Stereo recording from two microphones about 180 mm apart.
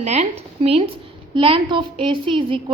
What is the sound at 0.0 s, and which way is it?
A woman's voice, 40° right (ahead or behind).